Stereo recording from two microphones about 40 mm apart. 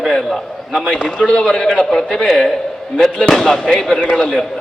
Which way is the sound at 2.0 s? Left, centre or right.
Centre.